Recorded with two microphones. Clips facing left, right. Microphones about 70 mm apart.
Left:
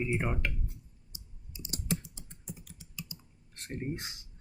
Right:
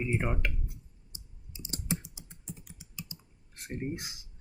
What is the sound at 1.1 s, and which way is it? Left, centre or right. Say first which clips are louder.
Typing: even; right.